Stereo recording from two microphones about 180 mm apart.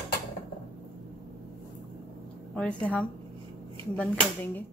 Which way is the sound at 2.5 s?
5° left (ahead or behind).